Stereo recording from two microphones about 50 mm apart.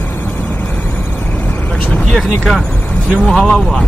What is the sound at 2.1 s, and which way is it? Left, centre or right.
Speech, centre.